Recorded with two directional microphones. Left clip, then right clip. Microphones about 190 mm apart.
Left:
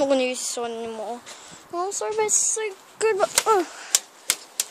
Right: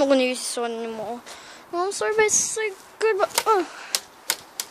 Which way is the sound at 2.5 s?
10° left (ahead or behind).